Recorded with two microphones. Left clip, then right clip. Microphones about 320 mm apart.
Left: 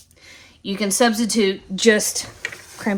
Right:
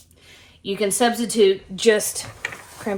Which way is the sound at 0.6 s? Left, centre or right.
Left.